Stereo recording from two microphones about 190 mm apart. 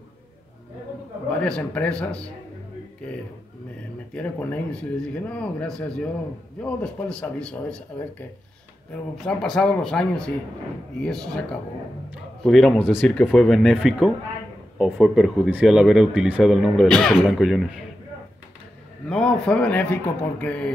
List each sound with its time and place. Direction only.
1.3 s speech: 5° left (ahead or behind)
4.1 s speech: 10° left (ahead or behind)
8.9 s speech: 5° left (ahead or behind)
12.4 s speech: centre (ahead or behind)
19.0 s speech: 5° left (ahead or behind)